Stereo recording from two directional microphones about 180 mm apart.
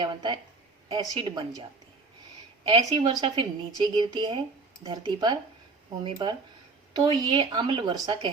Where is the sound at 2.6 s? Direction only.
30° right (ahead or behind).